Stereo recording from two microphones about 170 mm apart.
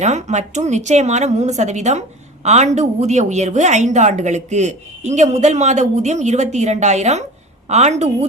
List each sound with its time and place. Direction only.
0.0 s a woman's voice: 45° right (ahead or behind)